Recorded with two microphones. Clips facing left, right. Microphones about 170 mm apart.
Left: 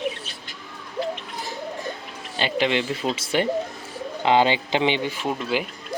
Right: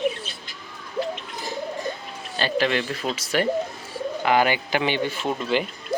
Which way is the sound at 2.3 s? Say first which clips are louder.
Even; 20° left (ahead or behind).